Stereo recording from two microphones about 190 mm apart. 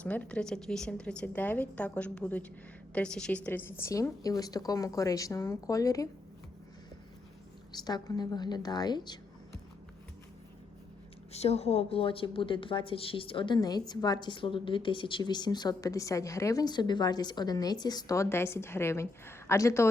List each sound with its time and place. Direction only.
0.0 s a woman's voice: 5° left (ahead or behind)
7.7 s a woman's voice: 20° left (ahead or behind)
11.3 s a woman's voice: 35° left (ahead or behind); by 19.9 s 15° left (ahead or behind)